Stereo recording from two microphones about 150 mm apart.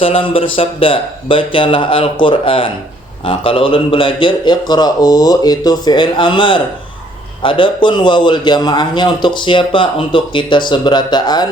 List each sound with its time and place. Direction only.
0.0 s a man's voice: 40° left (ahead or behind)